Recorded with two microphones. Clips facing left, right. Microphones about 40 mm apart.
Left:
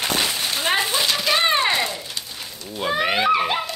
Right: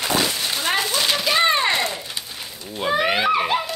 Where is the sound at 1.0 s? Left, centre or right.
Centre.